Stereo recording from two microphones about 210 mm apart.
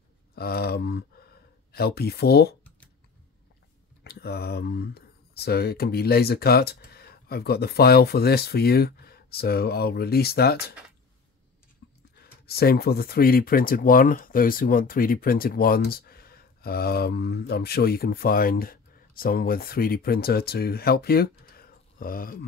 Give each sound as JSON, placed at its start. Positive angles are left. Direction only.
{"t": 0.4, "sound": "speech", "side_deg": 50}
{"t": 4.0, "sound": "speech", "side_deg": 50}
{"t": 11.8, "sound": "a sound", "side_deg": 55}
{"t": 12.2, "sound": "speech", "side_deg": 45}